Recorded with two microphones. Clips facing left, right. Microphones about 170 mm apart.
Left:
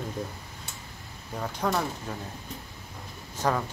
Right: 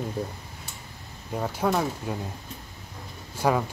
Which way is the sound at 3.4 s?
10° right (ahead or behind).